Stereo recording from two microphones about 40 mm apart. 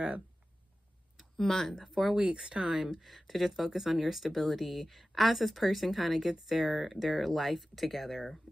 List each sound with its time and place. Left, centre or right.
1.3 s speech: centre
1.9 s speech: centre
2.1 s speech: right
2.7 s speech: centre